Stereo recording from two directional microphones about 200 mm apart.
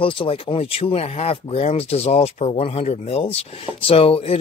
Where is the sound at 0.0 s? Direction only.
25° left (ahead or behind).